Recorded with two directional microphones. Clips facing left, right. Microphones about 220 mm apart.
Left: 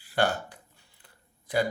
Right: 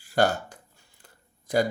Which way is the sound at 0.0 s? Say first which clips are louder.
Right 3 dB; 45° right (ahead or behind).